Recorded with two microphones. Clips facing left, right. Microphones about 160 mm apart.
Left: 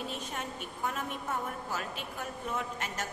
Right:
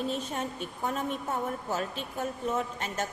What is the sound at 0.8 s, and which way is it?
A woman's voice, 30° right (ahead or behind).